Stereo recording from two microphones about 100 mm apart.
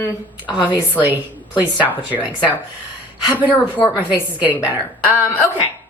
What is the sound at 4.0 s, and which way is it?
Speech, 15° right (ahead or behind).